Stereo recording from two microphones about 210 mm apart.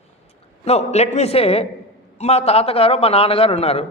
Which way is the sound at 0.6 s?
30° left (ahead or behind).